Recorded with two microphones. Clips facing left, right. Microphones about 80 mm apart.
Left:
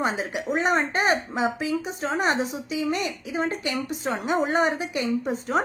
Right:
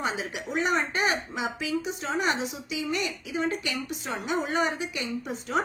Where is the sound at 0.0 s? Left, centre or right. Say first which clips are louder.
Left 5 dB; left.